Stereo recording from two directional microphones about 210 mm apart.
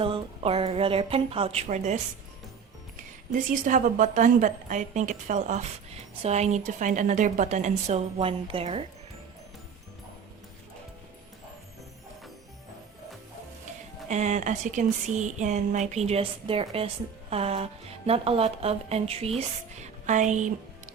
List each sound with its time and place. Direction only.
0.0 s a woman's voice: 25° right (ahead or behind)
3.3 s a woman's voice: 40° right (ahead or behind)
14.1 s a woman's voice: 35° right (ahead or behind)
19.8 s music: 35° right (ahead or behind)